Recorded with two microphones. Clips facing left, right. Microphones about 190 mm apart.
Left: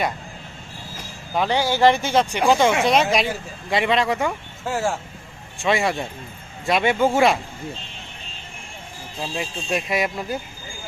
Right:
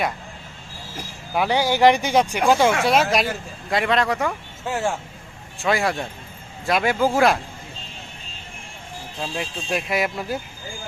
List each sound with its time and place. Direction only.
1.3 s speech: 10° right (ahead or behind)
9.2 s speech: centre (ahead or behind)